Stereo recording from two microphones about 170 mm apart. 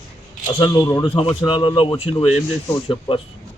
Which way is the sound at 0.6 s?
25° left (ahead or behind).